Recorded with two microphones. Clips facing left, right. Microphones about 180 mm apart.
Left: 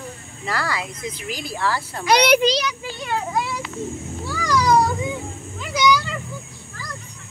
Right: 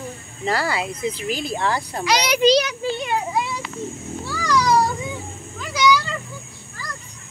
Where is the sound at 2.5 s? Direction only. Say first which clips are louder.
Right 6 dB; 55° right (ahead or behind).